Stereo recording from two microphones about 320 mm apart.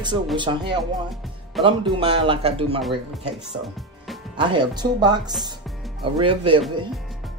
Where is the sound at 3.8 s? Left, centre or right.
Centre.